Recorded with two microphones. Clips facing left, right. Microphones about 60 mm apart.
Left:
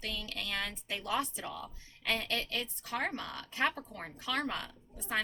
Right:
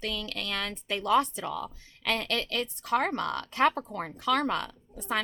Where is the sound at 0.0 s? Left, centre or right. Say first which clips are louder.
Right 6 dB; right.